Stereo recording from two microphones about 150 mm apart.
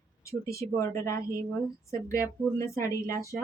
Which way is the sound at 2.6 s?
20° left (ahead or behind).